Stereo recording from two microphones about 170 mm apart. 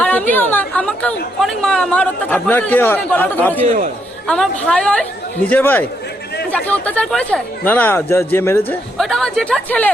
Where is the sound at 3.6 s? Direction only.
50° right (ahead or behind).